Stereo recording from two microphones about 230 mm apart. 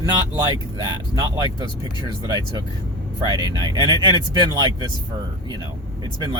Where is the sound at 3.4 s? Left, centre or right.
Centre.